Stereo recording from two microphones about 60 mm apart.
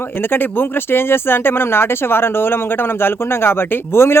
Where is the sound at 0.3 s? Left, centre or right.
Left.